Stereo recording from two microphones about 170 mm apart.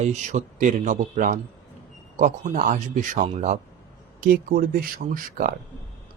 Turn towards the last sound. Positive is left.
turn(degrees=-55)  # may be behind; listen again after turning